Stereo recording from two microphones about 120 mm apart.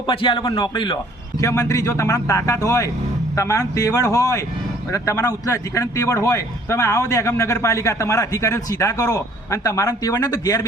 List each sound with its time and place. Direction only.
0.1 s a man's voice: 40° left (ahead or behind)
1.4 s a man's voice: 25° left (ahead or behind)